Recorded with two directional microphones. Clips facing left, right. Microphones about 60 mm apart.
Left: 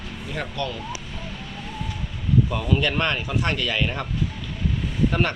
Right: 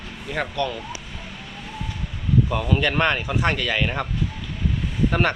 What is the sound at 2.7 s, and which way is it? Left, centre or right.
Speech, right.